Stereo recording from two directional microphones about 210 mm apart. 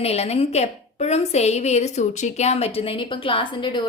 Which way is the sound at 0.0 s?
30° left (ahead or behind).